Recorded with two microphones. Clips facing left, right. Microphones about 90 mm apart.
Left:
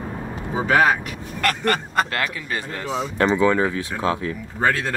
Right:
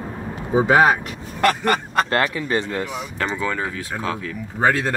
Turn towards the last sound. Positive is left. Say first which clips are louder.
# right 2 dB
turn(degrees=-5)  # may be behind; listen again after turning